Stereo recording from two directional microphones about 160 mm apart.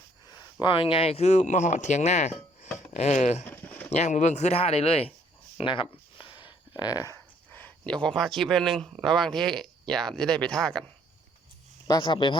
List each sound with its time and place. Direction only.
0.6 s speech: 35° left (ahead or behind)
3.4 s a sound: 10° left (ahead or behind)
3.9 s speech: 45° left (ahead or behind); by 10.8 s 5° left (ahead or behind)
11.9 s speech: 30° left (ahead or behind)